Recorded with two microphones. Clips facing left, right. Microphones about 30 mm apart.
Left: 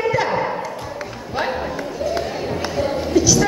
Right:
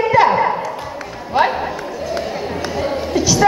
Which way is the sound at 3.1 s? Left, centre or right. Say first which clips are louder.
Right 2 dB; right.